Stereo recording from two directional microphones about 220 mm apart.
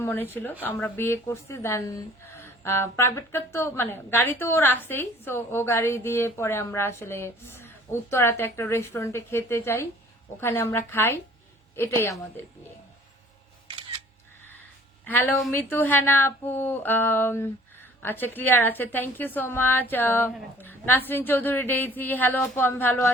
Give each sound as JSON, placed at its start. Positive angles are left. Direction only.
{"t": 0.0, "sound": "a woman's voice", "side_deg": 10}
{"t": 15.0, "sound": "a woman's voice", "side_deg": 10}